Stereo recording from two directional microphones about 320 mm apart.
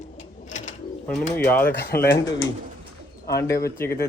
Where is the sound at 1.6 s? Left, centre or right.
Left.